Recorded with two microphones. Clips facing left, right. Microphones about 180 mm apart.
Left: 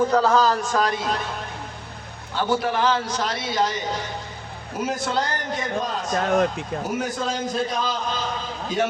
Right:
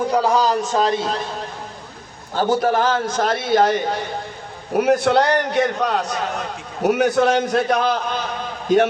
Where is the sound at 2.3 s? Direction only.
40° right (ahead or behind).